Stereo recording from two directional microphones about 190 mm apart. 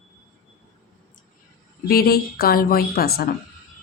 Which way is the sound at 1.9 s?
55° left (ahead or behind).